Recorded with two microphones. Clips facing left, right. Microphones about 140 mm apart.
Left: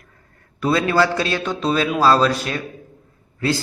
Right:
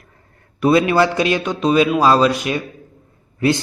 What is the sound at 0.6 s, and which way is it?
A man's voice, 20° right (ahead or behind).